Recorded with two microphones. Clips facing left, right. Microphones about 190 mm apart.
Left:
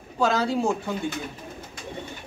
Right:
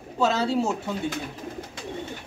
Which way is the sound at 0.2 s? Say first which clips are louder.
Even; 25° right (ahead or behind).